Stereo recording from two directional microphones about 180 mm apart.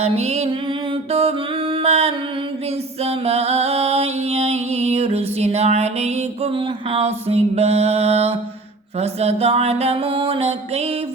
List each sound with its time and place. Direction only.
0.0 s music: 35° right (ahead or behind)
1.7 s music: 35° right (ahead or behind)